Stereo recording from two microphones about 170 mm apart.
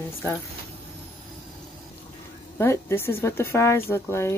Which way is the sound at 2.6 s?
15° left (ahead or behind).